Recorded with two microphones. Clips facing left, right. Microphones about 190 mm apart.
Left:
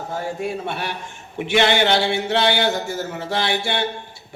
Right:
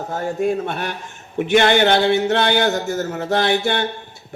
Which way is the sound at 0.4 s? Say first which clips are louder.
Right 5 dB; 50° right (ahead or behind).